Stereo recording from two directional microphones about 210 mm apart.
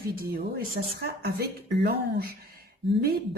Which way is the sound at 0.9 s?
50° right (ahead or behind).